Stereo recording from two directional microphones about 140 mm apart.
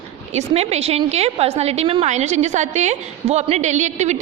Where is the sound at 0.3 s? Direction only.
50° right (ahead or behind).